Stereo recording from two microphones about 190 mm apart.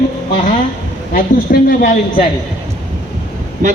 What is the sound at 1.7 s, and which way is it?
Speech, 45° left (ahead or behind).